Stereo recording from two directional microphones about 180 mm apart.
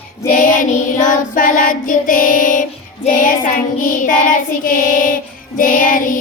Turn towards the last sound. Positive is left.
turn(degrees=50)  # may be behind; listen again after turning